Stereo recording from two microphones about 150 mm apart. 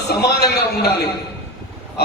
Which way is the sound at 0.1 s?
90° left.